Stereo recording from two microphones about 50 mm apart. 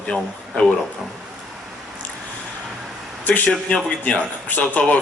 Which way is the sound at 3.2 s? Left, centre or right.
Left.